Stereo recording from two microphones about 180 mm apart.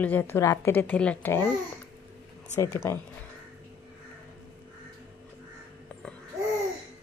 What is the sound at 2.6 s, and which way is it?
Speech, 15° left (ahead or behind).